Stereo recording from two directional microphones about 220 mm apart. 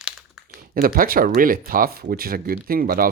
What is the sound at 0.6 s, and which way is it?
Speech, 40° right (ahead or behind).